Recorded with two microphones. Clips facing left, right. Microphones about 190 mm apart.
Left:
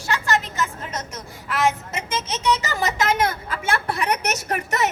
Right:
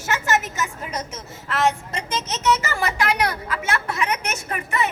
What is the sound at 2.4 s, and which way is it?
A woman's voice, 15° left (ahead or behind).